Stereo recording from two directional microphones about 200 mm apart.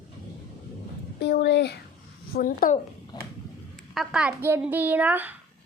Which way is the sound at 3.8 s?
Centre (ahead or behind).